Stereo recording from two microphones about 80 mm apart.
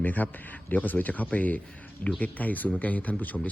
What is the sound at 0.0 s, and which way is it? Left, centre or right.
A man's voice, left.